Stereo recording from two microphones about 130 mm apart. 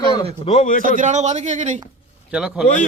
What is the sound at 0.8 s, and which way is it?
Speech, 90° right.